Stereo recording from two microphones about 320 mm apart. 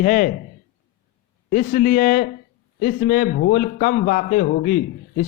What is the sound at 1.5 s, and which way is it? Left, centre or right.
A man's voice, left.